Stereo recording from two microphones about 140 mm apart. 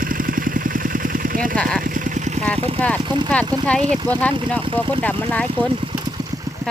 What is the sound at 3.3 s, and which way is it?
Speech, 10° left (ahead or behind).